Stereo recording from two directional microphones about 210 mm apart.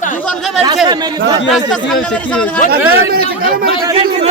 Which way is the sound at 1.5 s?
Centre (ahead or behind).